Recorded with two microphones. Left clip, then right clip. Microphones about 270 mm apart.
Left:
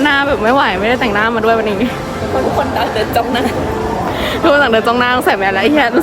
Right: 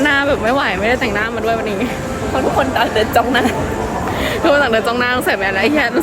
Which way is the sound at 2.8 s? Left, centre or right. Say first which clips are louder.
Right 1 dB; right.